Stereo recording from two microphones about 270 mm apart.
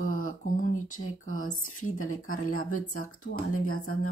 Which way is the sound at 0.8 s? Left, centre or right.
Left.